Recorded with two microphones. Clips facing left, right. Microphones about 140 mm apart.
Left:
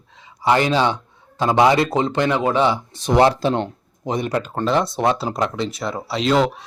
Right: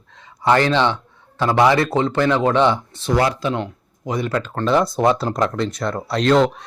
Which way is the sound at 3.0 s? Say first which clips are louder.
Left 3 dB; 25° left (ahead or behind).